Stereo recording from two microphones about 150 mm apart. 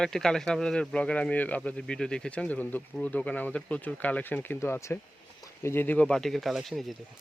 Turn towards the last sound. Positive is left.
turn(degrees=0)  # may be behind; listen again after turning